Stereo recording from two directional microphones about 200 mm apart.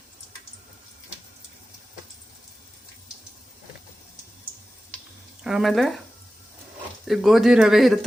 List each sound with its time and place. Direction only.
5.4 s speech: 5° right (ahead or behind)
7.0 s speech: centre (ahead or behind)